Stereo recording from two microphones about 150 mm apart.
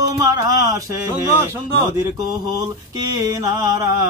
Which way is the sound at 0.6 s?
20° right (ahead or behind).